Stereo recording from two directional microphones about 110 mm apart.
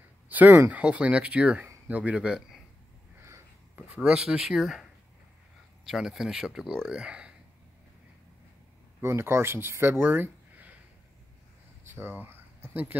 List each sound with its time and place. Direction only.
0.3 s speech: 15° right (ahead or behind)
3.2 s a sound: 25° right (ahead or behind)
3.9 s speech: 10° right (ahead or behind)
5.9 s speech: 5° right (ahead or behind)
9.0 s speech: 25° right (ahead or behind)
11.9 s speech: 20° right (ahead or behind)